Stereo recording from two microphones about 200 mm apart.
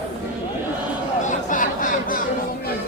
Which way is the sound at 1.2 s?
40° left (ahead or behind).